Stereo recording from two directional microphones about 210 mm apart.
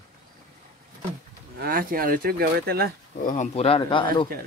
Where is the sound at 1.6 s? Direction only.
45° right (ahead or behind).